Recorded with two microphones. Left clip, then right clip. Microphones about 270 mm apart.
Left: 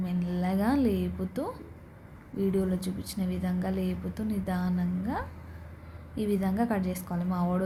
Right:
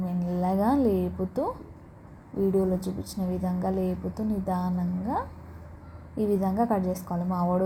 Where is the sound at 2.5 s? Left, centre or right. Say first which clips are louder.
Right 5 dB; centre.